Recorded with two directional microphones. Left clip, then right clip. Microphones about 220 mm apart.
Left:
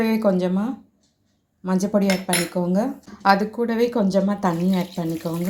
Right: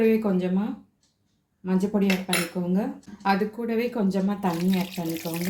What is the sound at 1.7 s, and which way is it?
Speech, 25° left (ahead or behind).